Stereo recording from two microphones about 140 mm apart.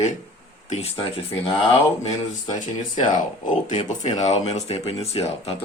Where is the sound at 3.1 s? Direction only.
65° left (ahead or behind).